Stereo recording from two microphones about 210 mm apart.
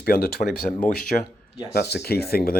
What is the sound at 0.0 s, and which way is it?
Speech, 45° left (ahead or behind).